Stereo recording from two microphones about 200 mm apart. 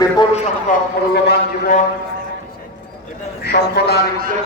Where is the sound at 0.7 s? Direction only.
40° left (ahead or behind).